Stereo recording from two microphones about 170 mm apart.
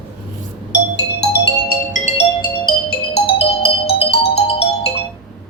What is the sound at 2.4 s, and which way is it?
Music, 30° left (ahead or behind).